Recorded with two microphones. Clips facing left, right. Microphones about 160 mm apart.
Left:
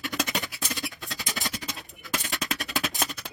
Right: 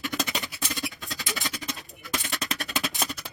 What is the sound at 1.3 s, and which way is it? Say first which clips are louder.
Music: even; centre (ahead or behind).